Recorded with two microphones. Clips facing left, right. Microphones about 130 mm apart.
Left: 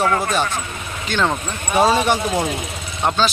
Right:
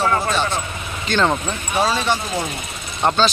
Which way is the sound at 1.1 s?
5° left (ahead or behind).